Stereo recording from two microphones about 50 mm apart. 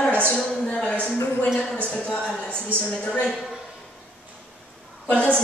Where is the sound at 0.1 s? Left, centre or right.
Left.